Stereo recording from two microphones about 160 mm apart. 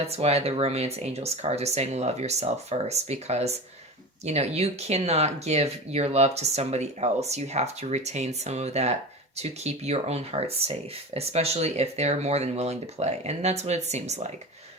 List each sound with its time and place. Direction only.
0.1 s speech: 40° right (ahead or behind)